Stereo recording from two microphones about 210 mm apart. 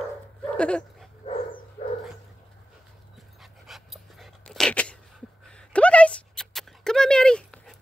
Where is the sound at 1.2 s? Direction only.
25° left (ahead or behind).